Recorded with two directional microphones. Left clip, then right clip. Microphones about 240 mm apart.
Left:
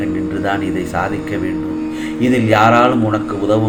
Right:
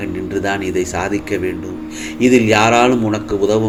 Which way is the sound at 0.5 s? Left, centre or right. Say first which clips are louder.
Even; right.